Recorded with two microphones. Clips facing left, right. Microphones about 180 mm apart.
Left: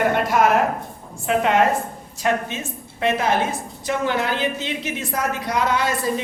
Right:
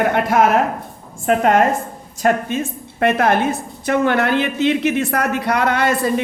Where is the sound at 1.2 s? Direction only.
45° right (ahead or behind).